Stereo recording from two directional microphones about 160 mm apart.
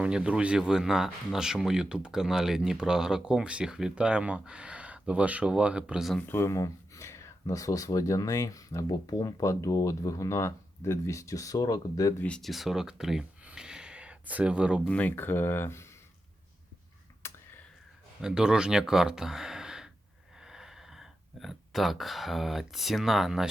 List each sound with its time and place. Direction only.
0.0 s speech: 5° right (ahead or behind)
6.1 s speech: 15° left (ahead or behind)
12.2 s speech: 5° left (ahead or behind)
14.8 s speech: 10° left (ahead or behind)
18.2 s speech: 5° right (ahead or behind)